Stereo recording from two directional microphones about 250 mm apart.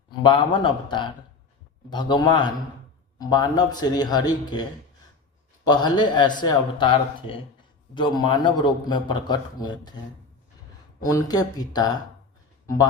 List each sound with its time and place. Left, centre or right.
0.1 s a man's voice: centre
5.6 s a man's voice: centre
11.0 s a man's voice: centre